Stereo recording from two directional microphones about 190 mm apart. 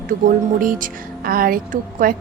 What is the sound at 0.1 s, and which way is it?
A woman's voice, 45° right (ahead or behind).